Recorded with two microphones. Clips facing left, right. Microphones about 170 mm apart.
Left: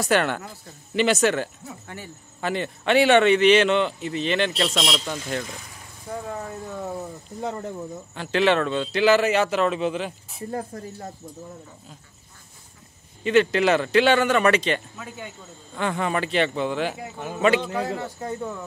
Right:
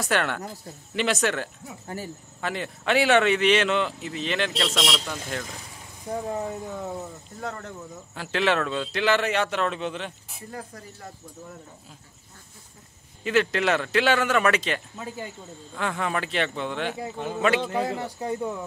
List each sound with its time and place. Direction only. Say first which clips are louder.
0.0 s speech: left 4 dB; centre (ahead or behind)
4.6 s a man's voice: left 1 dB; 10° left (ahead or behind)
5.3 s speech: left 4 dB; centre (ahead or behind)
6.0 s speech: right 3 dB; 20° right (ahead or behind)
6.8 s speech: left 2 dB; centre (ahead or behind)
7.3 s speech: left 5 dB; 20° left (ahead or behind)
8.1 s speech: left 4 dB; centre (ahead or behind)
10.5 s speech: left 8 dB; 30° left (ahead or behind)
13.2 s speech: left 4 dB; centre (ahead or behind)
17.7 s speech: even; 15° right (ahead or behind)